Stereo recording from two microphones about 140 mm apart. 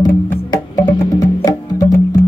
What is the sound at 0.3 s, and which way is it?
Music, 15° left (ahead or behind).